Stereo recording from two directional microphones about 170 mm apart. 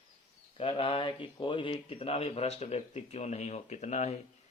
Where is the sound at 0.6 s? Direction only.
30° left (ahead or behind).